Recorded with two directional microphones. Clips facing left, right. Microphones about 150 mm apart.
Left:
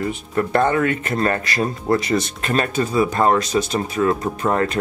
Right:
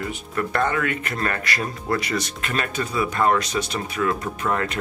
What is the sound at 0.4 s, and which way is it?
Speech, 30° left (ahead or behind).